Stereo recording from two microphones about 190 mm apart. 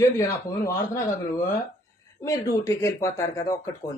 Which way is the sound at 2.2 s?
15° left (ahead or behind).